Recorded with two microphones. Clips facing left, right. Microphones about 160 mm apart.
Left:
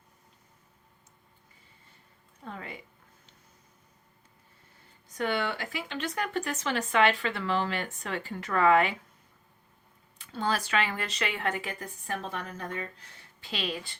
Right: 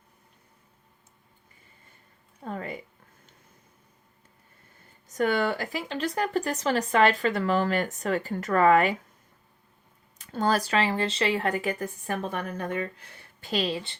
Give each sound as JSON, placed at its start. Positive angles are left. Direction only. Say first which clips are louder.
{"t": 2.4, "sound": "speech", "louder": "right 7 dB", "side_deg": -45}
{"t": 5.0, "sound": "speech", "louder": "right 5 dB", "side_deg": -45}
{"t": 10.2, "sound": "speech", "louder": "right 5 dB", "side_deg": -40}
{"t": 13.7, "sound": "a woman's voice", "louder": "right 5 dB", "side_deg": -25}